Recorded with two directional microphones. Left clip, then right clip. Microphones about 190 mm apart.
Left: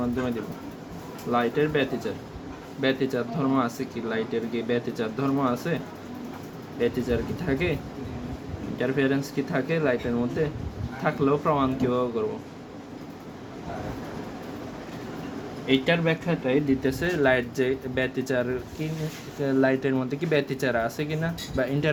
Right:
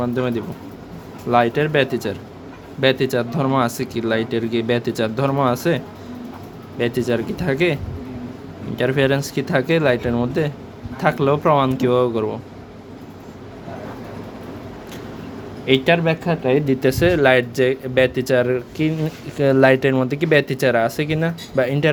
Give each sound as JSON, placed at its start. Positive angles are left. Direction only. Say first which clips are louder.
{"t": 0.0, "sound": "speech", "louder": "right 7 dB", "side_deg": -50}
{"t": 8.8, "sound": "speech", "louder": "right 7 dB", "side_deg": -55}
{"t": 15.6, "sound": "speech", "louder": "right 7 dB", "side_deg": -55}